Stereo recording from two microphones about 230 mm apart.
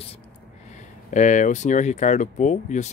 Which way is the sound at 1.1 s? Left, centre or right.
Left.